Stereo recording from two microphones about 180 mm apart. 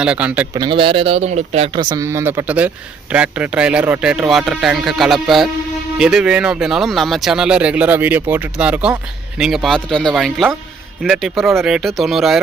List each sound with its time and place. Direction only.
0.0 s speech: 5° right (ahead or behind)
0.5 s speech: 25° right (ahead or behind)
1.8 s speech: 20° right (ahead or behind); by 12.4 s centre (ahead or behind)